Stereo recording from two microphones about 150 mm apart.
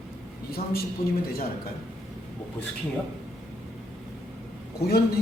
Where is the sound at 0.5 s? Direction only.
85° left.